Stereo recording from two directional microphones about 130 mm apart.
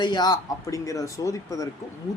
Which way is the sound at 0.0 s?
35° left (ahead or behind).